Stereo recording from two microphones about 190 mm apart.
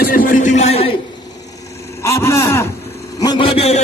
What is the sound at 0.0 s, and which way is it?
Music, 50° left (ahead or behind).